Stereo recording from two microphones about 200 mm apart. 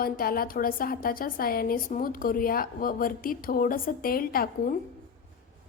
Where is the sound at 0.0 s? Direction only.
45° left (ahead or behind).